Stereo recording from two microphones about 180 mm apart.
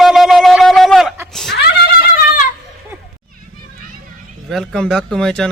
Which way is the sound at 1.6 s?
60° left (ahead or behind).